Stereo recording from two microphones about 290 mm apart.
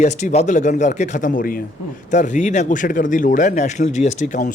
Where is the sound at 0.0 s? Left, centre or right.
Left.